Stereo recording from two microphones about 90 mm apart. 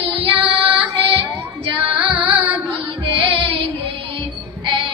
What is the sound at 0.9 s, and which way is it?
Child singing, 75° right (ahead or behind).